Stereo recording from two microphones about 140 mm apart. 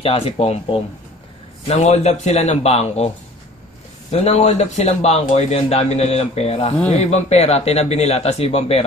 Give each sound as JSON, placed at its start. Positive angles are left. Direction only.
{"t": 0.0, "sound": "a man's voice", "side_deg": 45}
{"t": 4.1, "sound": "a man's voice", "side_deg": 50}